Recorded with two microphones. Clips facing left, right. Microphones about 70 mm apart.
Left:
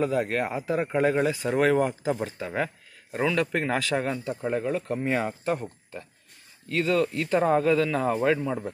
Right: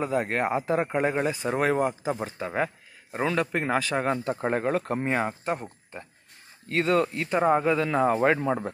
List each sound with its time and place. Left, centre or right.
0.0 s speech: right
4.2 s speech: right
5.0 s speech: right
7.2 s speech: right